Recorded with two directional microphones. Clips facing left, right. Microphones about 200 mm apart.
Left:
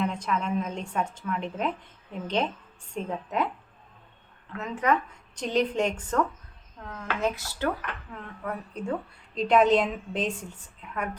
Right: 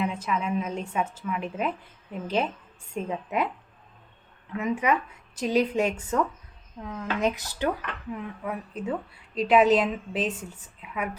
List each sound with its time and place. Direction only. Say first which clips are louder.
0.0 s a woman's voice: even; 5° right (ahead or behind)
4.5 s a woman's voice: right 1 dB; 10° right (ahead or behind)